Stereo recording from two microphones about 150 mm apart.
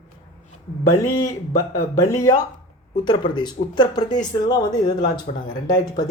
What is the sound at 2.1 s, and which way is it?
Speech, 25° left (ahead or behind).